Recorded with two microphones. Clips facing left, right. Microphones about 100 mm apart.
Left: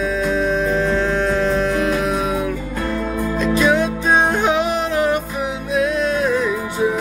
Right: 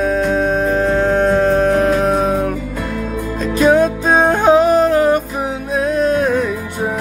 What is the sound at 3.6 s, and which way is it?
Music, 45° right (ahead or behind).